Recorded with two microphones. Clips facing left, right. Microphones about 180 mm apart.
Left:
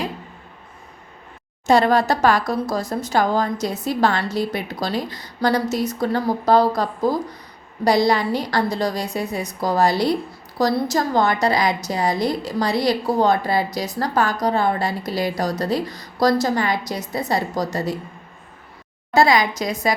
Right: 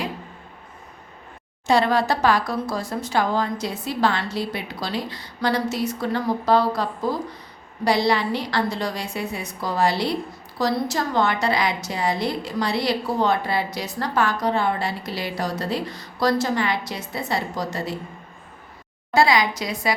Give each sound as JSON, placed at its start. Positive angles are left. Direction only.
{"t": 1.6, "sound": "a woman's voice", "side_deg": 45}
{"t": 19.1, "sound": "speech", "side_deg": 45}